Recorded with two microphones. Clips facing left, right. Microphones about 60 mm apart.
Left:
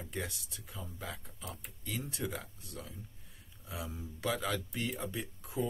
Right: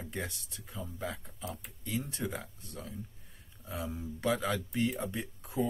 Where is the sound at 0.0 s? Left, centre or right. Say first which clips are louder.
Right 1 dB; centre.